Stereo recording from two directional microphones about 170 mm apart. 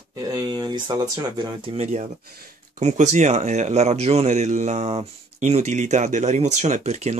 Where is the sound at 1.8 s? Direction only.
40° right (ahead or behind).